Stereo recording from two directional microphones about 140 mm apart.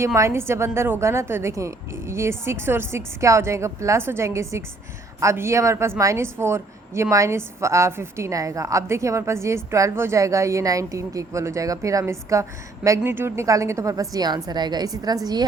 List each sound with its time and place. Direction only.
0.0 s a woman's voice: 20° right (ahead or behind)